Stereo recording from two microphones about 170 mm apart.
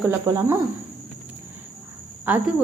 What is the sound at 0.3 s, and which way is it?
Speech, 20° right (ahead or behind).